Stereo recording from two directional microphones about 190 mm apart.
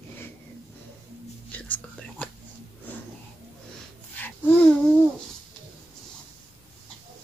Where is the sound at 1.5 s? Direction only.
5° left (ahead or behind).